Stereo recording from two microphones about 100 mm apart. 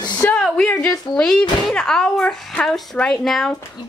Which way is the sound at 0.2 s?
15° left (ahead or behind).